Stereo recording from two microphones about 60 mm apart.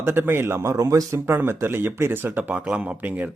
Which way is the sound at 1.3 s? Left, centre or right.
Right.